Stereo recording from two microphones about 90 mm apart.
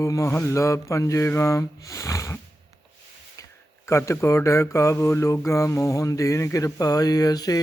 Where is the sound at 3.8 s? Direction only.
30° left (ahead or behind).